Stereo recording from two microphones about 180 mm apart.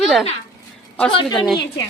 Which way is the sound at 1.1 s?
25° left (ahead or behind).